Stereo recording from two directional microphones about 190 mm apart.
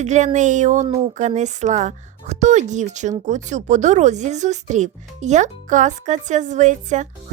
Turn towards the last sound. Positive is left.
turn(degrees=-40)  # may be behind; listen again after turning